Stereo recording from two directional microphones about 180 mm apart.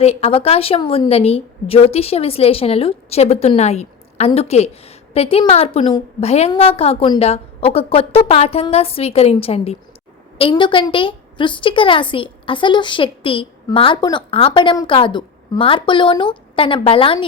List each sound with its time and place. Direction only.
0.0 s a woman's voice: 35° left (ahead or behind)